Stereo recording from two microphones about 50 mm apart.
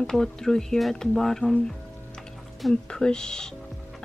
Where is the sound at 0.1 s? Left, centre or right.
Centre.